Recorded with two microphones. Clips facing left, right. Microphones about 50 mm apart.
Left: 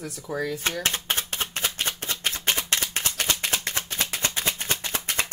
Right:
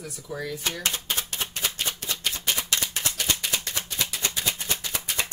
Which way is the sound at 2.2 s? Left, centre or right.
Left.